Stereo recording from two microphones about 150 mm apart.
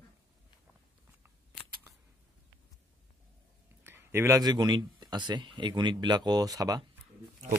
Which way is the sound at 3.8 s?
15° right (ahead or behind).